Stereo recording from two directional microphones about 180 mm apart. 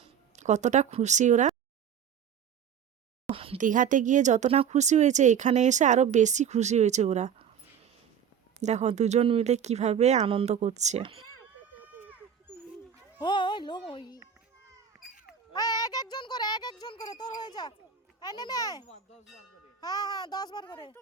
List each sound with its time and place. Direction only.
0.0 s speech: 40° right (ahead or behind)
3.2 s a sound: 30° right (ahead or behind)
3.6 s speech: 45° right (ahead or behind)
8.6 s speech: 40° right (ahead or behind)
11.8 s goat: 10° right (ahead or behind)
13.1 s a child's voice: 25° left (ahead or behind)
15.5 s a child's voice: 20° left (ahead or behind)